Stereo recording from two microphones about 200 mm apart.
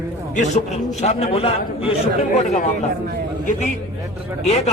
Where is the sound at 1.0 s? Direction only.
30° left (ahead or behind).